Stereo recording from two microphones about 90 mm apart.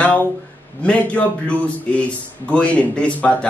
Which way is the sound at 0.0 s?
20° left (ahead or behind).